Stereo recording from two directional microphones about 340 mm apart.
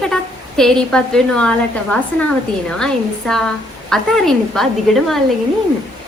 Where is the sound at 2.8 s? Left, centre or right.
Centre.